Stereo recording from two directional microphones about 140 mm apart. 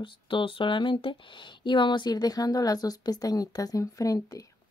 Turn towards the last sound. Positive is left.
turn(degrees=25)  # may be behind; listen again after turning